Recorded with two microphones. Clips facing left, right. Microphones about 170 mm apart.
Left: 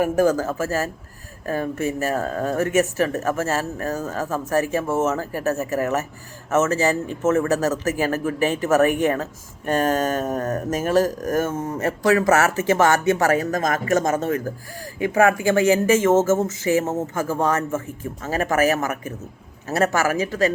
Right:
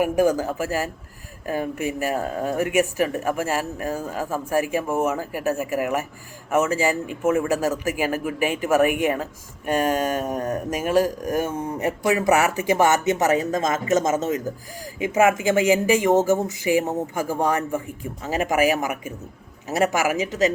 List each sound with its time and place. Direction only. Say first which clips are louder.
0.0 s speech: left 1 dB; 15° right (ahead or behind)